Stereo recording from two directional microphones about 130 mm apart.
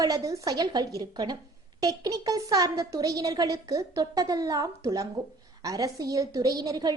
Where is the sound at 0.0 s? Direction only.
25° right (ahead or behind).